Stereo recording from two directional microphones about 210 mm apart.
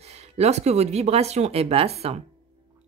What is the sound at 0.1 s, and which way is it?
Speech, 30° right (ahead or behind).